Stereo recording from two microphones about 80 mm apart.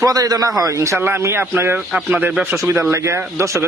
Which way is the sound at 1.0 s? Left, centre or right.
Right.